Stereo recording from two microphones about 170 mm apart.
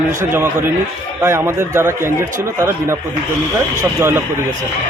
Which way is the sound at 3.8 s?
15° right (ahead or behind).